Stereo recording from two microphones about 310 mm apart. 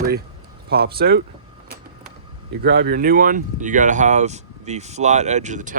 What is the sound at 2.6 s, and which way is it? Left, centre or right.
Speech, right.